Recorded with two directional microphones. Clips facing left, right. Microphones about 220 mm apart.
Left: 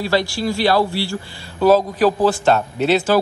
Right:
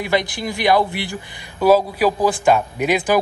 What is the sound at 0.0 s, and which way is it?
Speech, 20° right (ahead or behind).